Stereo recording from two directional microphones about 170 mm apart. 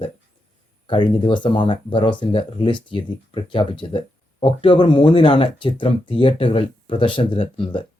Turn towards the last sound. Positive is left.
turn(degrees=35)  # may be behind; listen again after turning